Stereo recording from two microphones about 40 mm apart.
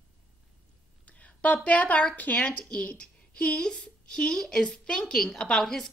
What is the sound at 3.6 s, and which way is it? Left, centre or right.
Speech, centre.